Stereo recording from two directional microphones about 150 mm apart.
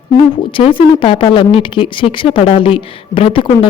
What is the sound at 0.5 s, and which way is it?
Speech, 35° left (ahead or behind).